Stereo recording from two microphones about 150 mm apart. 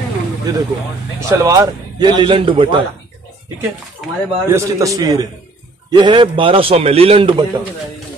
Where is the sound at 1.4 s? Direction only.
25° right (ahead or behind).